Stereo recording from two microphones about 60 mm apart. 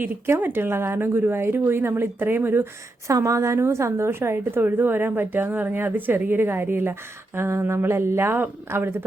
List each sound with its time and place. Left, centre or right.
0.3 s speech: right
0.9 s speech: right
3.1 s speech: right